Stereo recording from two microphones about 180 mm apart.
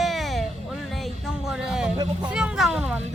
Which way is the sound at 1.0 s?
Centre (ahead or behind).